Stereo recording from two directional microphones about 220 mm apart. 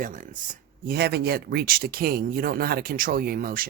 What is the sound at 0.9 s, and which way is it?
Speech, 45° right (ahead or behind).